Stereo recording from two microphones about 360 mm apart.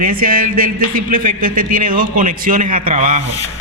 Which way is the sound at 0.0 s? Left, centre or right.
Right.